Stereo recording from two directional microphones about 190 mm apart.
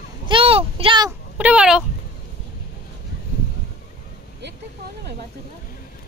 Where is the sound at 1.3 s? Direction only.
5° right (ahead or behind).